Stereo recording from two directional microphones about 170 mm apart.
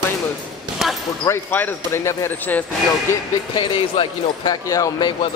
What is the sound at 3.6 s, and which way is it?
Speech, 25° left (ahead or behind).